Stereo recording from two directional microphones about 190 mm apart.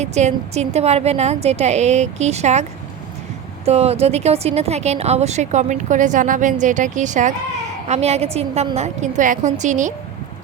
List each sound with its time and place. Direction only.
0.0 s speech: 35° right (ahead or behind)
3.7 s speech: 35° right (ahead or behind)